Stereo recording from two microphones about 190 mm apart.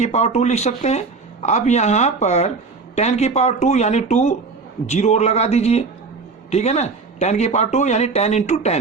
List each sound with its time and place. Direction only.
0.0 s speech: 35° left (ahead or behind)